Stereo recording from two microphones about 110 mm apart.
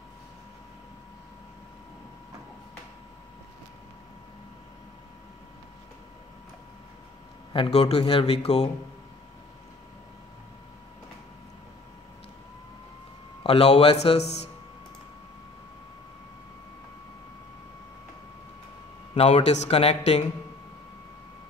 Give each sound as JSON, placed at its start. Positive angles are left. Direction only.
{"t": 7.5, "sound": "a man's voice", "side_deg": 65}
{"t": 13.4, "sound": "speech", "side_deg": 65}
{"t": 19.1, "sound": "speech", "side_deg": 75}